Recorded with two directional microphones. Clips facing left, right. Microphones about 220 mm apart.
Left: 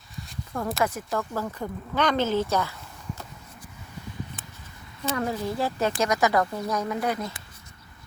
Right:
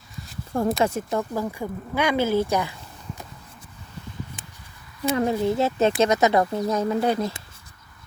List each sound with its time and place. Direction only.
0.5 s speech: 30° right (ahead or behind); by 2.7 s 15° right (ahead or behind)
5.1 s speech: 25° right (ahead or behind)